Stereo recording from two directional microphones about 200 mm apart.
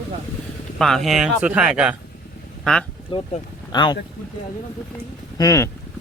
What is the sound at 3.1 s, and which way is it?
Speech, 25° left (ahead or behind).